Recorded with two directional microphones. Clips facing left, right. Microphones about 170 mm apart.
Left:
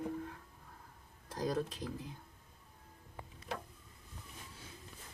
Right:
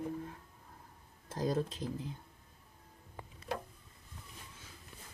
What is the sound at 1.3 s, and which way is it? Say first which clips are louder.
Speech: right 2 dB; 25° right (ahead or behind).